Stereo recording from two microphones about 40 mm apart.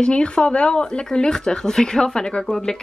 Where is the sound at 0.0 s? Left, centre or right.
Left.